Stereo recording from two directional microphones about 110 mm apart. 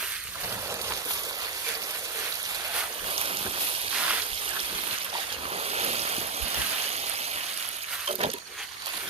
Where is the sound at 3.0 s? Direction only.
60° right (ahead or behind).